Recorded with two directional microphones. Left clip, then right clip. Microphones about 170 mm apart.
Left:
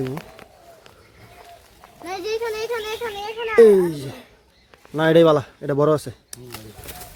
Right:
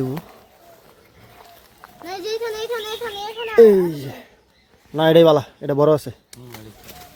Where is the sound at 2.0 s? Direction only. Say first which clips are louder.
Even; 30° right (ahead or behind).